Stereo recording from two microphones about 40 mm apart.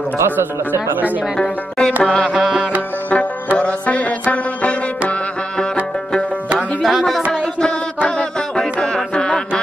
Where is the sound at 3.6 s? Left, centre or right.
Left.